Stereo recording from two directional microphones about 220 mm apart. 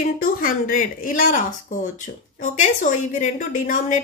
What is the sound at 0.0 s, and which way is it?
A woman's voice, 40° left (ahead or behind).